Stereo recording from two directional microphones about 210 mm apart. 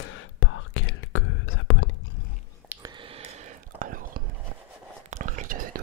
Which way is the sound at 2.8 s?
20° right (ahead or behind).